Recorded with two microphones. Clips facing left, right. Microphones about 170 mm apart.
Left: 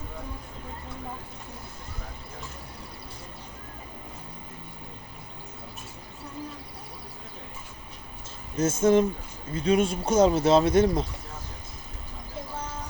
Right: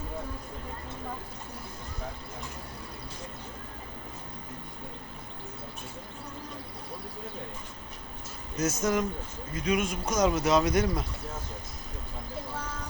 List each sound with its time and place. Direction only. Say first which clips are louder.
8.5 s speech: left 7 dB; 30° left (ahead or behind)